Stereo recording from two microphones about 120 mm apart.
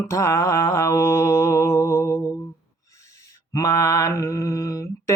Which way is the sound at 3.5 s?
25° left (ahead or behind).